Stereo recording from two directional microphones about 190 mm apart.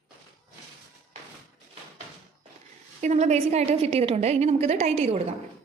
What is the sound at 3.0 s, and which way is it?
A woman's voice, 35° right (ahead or behind).